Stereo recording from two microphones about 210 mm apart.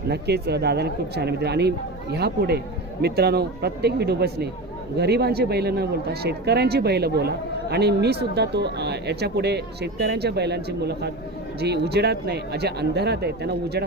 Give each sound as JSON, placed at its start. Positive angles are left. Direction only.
{"t": 0.1, "sound": "speech", "side_deg": -50}